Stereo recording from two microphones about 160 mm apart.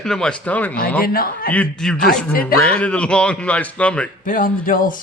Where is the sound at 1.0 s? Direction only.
65° left (ahead or behind).